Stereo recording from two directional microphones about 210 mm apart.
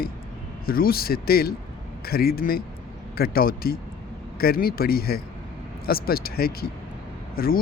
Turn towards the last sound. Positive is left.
turn(degrees=45)  # may be behind; listen again after turning